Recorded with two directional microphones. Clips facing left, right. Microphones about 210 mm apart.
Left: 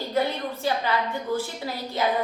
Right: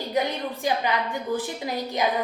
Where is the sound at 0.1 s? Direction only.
15° right (ahead or behind).